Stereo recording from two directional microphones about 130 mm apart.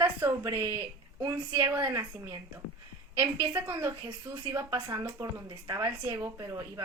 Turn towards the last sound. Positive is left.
turn(degrees=-20)  # may be behind; listen again after turning